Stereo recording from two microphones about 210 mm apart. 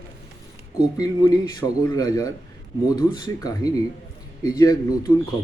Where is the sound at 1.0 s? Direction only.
15° left (ahead or behind).